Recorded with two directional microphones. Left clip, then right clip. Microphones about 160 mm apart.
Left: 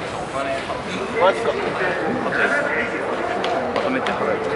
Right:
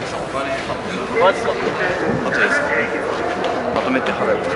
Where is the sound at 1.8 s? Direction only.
25° right (ahead or behind).